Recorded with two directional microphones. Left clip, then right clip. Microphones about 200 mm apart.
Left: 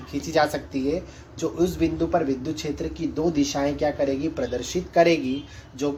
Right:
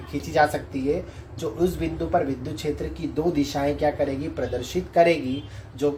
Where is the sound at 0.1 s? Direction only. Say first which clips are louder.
Right 1 dB; 40° left (ahead or behind).